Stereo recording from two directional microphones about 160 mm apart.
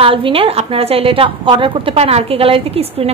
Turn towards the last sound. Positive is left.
turn(degrees=-40)  # may be behind; listen again after turning